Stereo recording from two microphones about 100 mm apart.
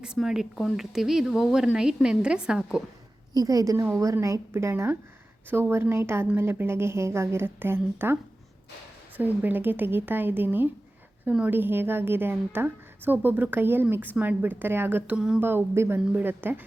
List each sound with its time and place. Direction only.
0.0 s speech: 5° right (ahead or behind)
3.3 s a woman's voice: 35° right (ahead or behind); by 15.1 s 20° right (ahead or behind)
15.1 s speech: 10° right (ahead or behind)
15.4 s a woman's voice: 20° right (ahead or behind)